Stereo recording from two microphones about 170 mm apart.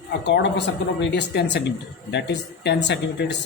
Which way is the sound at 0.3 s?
90° left.